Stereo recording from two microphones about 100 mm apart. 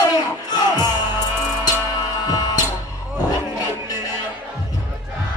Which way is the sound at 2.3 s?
40° left (ahead or behind).